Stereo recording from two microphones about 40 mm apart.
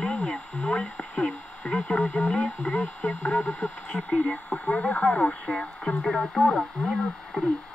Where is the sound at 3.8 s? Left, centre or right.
Left.